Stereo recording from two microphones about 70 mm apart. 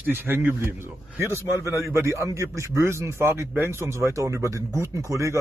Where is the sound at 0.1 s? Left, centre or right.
Right.